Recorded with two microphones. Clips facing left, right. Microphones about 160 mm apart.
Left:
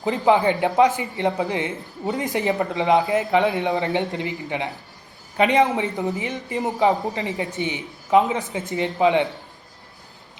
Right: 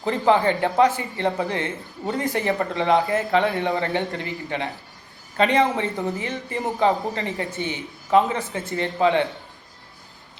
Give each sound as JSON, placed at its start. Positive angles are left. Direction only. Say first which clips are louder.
{"t": 0.0, "sound": "a man's voice", "louder": "left 1 dB", "side_deg": 15}